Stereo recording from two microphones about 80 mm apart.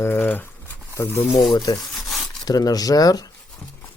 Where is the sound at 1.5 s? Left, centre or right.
Left.